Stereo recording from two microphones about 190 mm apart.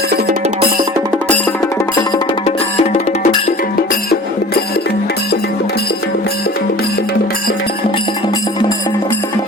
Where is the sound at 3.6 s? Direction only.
45° left (ahead or behind).